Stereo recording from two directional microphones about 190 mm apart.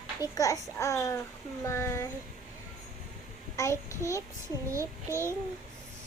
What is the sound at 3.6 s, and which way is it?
Speech, 15° left (ahead or behind).